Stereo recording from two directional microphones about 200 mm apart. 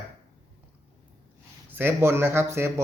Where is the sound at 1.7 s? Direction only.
10° right (ahead or behind).